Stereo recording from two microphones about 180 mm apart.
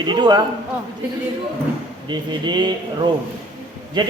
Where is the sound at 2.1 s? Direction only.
25° right (ahead or behind).